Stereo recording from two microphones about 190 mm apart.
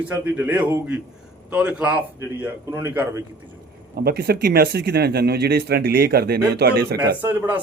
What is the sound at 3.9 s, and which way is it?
Speech, 55° right (ahead or behind).